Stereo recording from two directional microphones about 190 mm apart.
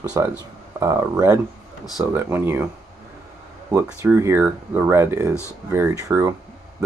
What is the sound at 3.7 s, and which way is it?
Speech, 15° right (ahead or behind).